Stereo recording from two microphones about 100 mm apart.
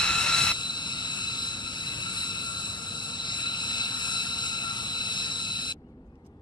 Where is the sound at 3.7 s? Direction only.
50° left (ahead or behind).